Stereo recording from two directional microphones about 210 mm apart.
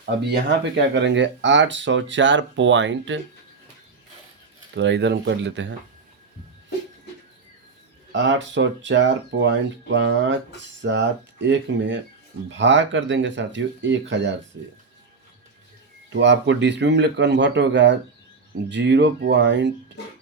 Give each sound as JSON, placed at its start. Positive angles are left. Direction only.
{"t": 0.0, "sound": "speech", "side_deg": -50}
{"t": 4.7, "sound": "speech", "side_deg": -55}
{"t": 8.1, "sound": "speech", "side_deg": -60}
{"t": 16.1, "sound": "speech", "side_deg": -55}